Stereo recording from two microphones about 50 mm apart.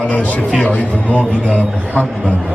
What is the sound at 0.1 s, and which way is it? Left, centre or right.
Speech, left.